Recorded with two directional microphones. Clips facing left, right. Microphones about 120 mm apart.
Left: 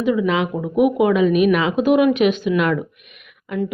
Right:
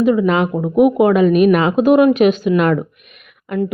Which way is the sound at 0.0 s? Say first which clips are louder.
Right 4 dB; 45° right (ahead or behind).